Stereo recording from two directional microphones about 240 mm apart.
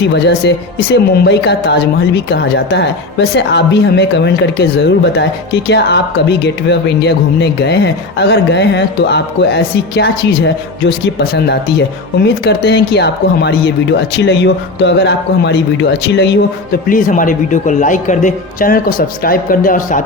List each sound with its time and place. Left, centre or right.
0.0 s speech: left
12.2 s a man's voice: left